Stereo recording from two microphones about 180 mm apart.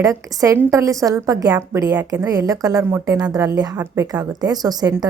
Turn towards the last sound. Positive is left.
turn(degrees=-20)  # may be behind; listen again after turning